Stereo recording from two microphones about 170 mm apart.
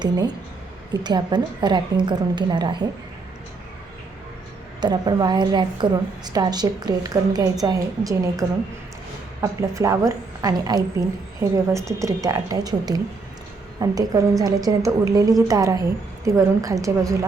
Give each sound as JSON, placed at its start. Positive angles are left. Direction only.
{"t": 1.0, "sound": "a woman's voice", "side_deg": -25}
{"t": 4.8, "sound": "a woman's voice", "side_deg": -25}